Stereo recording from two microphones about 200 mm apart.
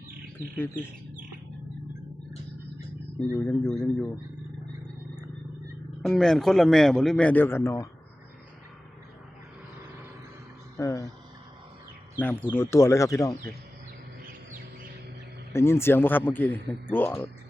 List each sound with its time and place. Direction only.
0.5 s speech: 10° left (ahead or behind)
3.3 s speech: 15° left (ahead or behind)
6.0 s a man's voice: centre (ahead or behind)
10.8 s speech: 15° left (ahead or behind)
12.2 s speech: 10° left (ahead or behind)
15.5 s speech: 10° left (ahead or behind)